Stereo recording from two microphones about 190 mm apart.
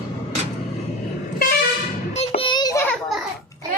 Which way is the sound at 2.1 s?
30° left (ahead or behind).